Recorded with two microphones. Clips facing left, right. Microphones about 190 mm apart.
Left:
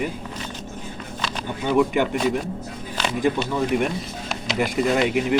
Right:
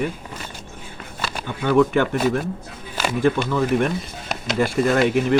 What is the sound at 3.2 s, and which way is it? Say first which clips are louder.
Speech: right 3 dB; 15° left (ahead or behind).